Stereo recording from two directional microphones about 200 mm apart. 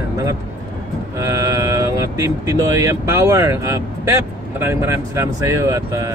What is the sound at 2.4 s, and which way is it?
Speech, 15° right (ahead or behind).